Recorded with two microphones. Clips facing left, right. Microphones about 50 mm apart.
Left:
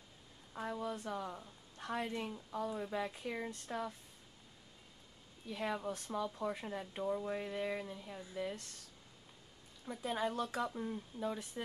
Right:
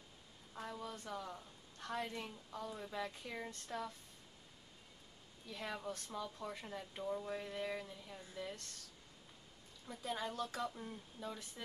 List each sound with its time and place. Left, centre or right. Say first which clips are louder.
0.5 s a woman's voice: left 6 dB; centre
5.5 s speech: left 5 dB; centre
9.8 s speech: left 5 dB; centre